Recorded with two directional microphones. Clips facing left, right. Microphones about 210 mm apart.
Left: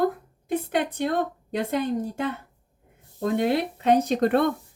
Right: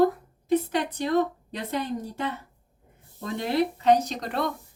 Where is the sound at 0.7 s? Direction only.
50° left (ahead or behind).